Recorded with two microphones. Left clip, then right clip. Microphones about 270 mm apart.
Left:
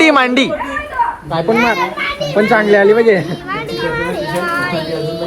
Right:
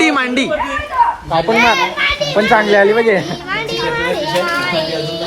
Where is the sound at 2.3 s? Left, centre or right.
Right.